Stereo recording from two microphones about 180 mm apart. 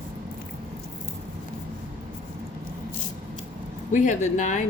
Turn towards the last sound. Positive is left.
turn(degrees=45)  # may be behind; listen again after turning